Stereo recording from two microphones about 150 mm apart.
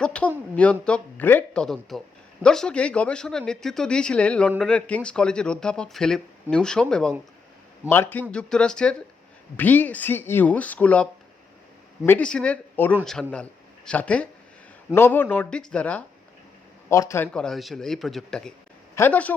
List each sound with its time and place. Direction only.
0.0 s a man's voice: 5° left (ahead or behind)
16.9 s a man's voice: 20° left (ahead or behind)
17.3 s speech: 5° left (ahead or behind)